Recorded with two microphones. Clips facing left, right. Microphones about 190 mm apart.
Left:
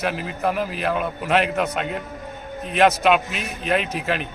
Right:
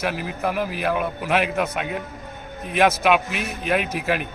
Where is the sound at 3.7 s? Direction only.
5° right (ahead or behind).